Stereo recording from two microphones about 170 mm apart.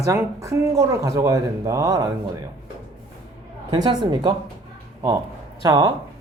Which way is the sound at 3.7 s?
25° right (ahead or behind).